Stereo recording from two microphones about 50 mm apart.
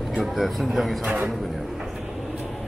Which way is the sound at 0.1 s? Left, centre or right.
Centre.